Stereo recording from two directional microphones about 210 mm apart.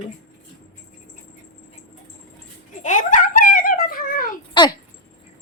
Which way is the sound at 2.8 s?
35° left (ahead or behind).